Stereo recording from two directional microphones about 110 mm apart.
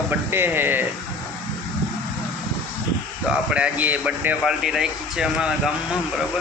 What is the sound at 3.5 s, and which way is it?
Speech, 10° right (ahead or behind).